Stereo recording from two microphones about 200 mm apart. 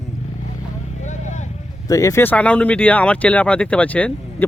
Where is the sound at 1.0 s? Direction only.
35° left (ahead or behind).